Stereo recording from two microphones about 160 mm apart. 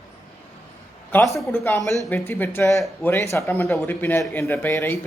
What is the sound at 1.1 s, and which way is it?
A man's voice, 20° left (ahead or behind).